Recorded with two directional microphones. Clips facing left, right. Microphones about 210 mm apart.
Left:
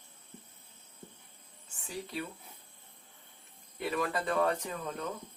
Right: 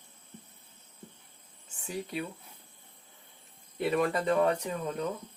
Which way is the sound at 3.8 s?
25° right (ahead or behind).